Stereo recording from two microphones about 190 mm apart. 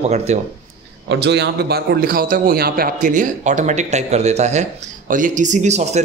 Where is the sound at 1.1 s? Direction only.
65° right (ahead or behind).